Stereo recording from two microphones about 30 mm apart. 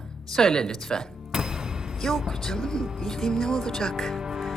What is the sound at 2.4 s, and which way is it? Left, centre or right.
Speech, centre.